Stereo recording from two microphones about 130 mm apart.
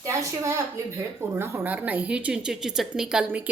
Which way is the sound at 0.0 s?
25° right (ahead or behind).